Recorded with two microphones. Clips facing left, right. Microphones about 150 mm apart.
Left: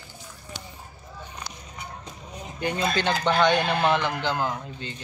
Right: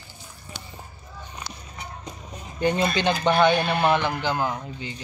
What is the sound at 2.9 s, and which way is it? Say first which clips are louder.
A man's voice: even; 15° right (ahead or behind).